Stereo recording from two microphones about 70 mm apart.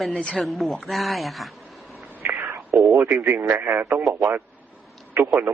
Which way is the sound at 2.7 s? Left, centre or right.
Centre.